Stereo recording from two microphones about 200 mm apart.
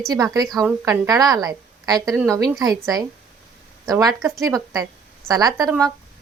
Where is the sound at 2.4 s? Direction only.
20° right (ahead or behind).